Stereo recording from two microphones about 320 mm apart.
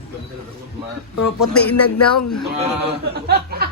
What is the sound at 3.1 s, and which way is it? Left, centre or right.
Speech, right.